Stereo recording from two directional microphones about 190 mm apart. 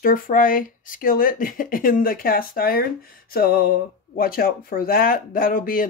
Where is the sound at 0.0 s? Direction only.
45° left (ahead or behind).